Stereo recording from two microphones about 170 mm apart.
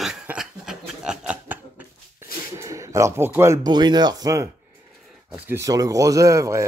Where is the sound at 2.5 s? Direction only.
20° right (ahead or behind).